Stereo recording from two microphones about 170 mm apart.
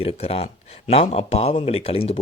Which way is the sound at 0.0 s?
35° left (ahead or behind).